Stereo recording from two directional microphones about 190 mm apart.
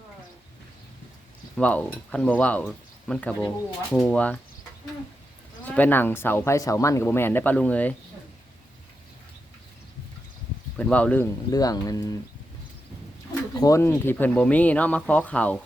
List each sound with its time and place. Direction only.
1.5 s speech: 5° left (ahead or behind)
5.7 s speech: 10° left (ahead or behind)
10.8 s speech: 5° left (ahead or behind)
11.5 s speech: 20° left (ahead or behind)
13.5 s speech: 20° left (ahead or behind)